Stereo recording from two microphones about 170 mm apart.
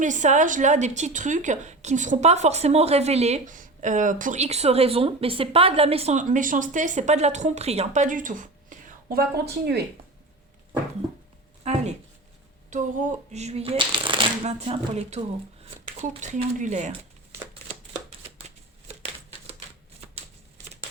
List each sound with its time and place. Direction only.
0.0 s a woman's voice: 45° right (ahead or behind)
9.0 s speech: 65° right (ahead or behind)
11.6 s a woman's voice: 40° right (ahead or behind)